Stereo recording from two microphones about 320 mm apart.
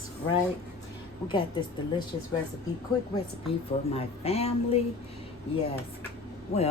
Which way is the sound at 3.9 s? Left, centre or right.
Centre.